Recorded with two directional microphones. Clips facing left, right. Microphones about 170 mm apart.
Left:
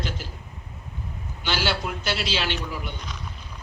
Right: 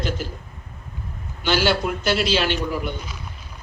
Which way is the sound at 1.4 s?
45° right (ahead or behind).